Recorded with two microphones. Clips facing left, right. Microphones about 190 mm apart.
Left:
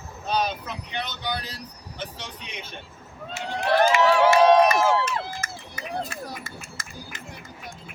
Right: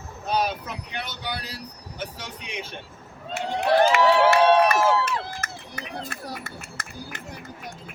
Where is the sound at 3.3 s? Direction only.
65° right (ahead or behind).